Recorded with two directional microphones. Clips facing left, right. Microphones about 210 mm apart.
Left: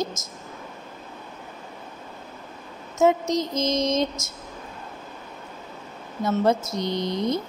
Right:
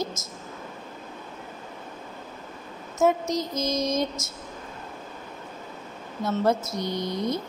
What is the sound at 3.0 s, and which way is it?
A woman's voice, 20° left (ahead or behind).